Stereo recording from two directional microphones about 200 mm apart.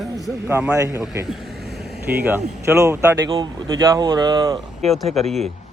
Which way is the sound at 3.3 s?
25° right (ahead or behind).